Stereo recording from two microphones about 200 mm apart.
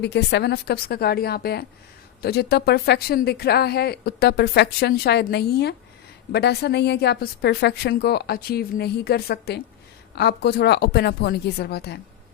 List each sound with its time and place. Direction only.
0.0 s speech: 55° left (ahead or behind)